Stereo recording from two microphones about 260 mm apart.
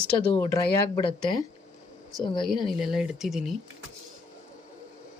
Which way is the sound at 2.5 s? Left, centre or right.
Centre.